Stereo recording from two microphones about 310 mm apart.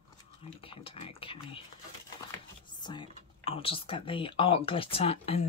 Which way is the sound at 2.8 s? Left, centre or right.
Centre.